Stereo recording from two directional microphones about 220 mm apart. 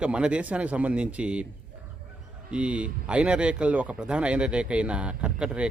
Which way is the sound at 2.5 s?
5° right (ahead or behind).